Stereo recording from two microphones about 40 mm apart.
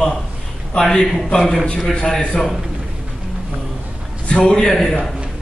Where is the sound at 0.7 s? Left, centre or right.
Centre.